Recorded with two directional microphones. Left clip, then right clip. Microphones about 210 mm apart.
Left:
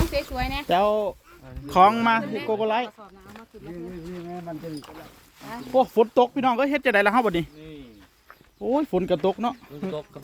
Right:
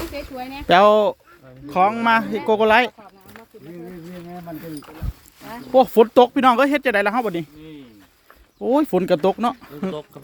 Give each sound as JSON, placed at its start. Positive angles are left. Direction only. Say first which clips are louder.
{"t": 0.1, "sound": "a sound", "louder": "left 4 dB", "side_deg": 30}
{"t": 0.7, "sound": "speech", "louder": "right 9 dB", "side_deg": -35}
{"t": 1.7, "sound": "speech", "louder": "left 1 dB", "side_deg": 5}
{"t": 2.5, "sound": "speech", "louder": "right 9 dB", "side_deg": -35}
{"t": 4.3, "sound": "speech", "louder": "right 2 dB", "side_deg": -25}
{"t": 5.5, "sound": "speech", "louder": "right 6 dB", "side_deg": -40}
{"t": 6.7, "sound": "speech", "louder": "right 3 dB", "side_deg": -15}
{"t": 6.9, "sound": "speech", "louder": "even", "side_deg": 0}
{"t": 8.6, "sound": "speech", "louder": "right 5 dB", "side_deg": -25}